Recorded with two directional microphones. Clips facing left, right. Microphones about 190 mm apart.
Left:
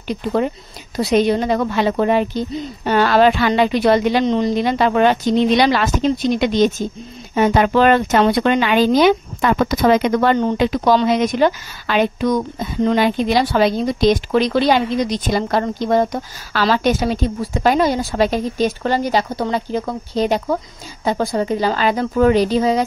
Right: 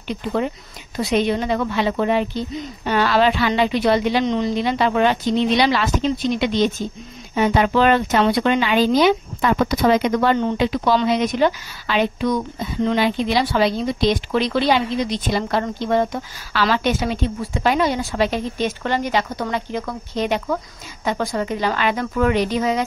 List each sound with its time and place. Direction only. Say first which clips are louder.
0.1 s a woman's voice: left 3 dB; 40° left (ahead or behind)